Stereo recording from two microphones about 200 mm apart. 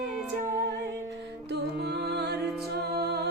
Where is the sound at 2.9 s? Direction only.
55° right (ahead or behind).